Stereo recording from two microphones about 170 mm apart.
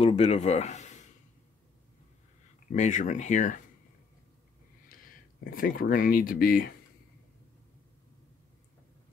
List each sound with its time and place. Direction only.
0.0 s speech: 40° left (ahead or behind)
2.7 s speech: 45° left (ahead or behind)
4.8 s speech: 55° left (ahead or behind)